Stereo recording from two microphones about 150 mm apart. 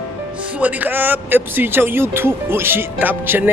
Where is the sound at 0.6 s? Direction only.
10° right (ahead or behind).